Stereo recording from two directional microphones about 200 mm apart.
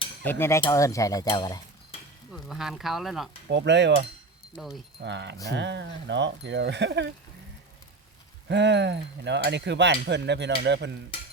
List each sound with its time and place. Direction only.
0.3 s cutlery: 10° left (ahead or behind)
2.3 s speech: centre (ahead or behind)
3.5 s speech: 60° right (ahead or behind)
4.5 s speech: centre (ahead or behind)
4.9 s speech: 60° right (ahead or behind)
8.4 s speech: 60° right (ahead or behind)